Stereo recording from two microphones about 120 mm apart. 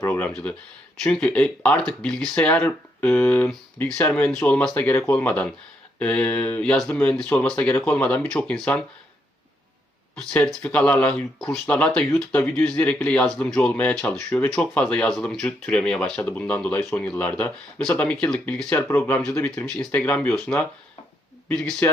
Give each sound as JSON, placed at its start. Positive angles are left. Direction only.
{"t": 0.0, "sound": "a sound", "side_deg": 15}
{"t": 1.0, "sound": "speech", "side_deg": 10}
{"t": 10.2, "sound": "speech", "side_deg": 10}
{"t": 19.6, "sound": "speech", "side_deg": 10}